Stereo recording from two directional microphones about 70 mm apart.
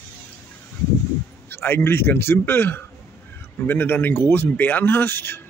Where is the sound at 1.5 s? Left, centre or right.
Left.